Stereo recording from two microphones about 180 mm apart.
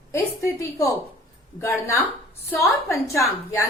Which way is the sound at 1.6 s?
15° left (ahead or behind).